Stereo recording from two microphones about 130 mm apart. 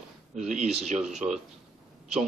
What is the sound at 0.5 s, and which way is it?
Speech, 60° right (ahead or behind).